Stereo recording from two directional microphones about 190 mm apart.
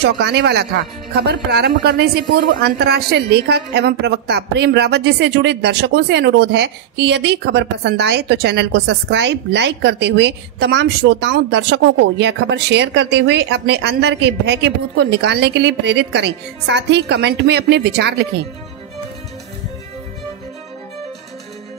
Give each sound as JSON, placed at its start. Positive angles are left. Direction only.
{"t": 0.0, "sound": "a woman's voice", "side_deg": -60}